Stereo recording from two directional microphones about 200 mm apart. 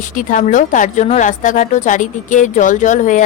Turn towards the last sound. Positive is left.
turn(degrees=40)  # may be behind; listen again after turning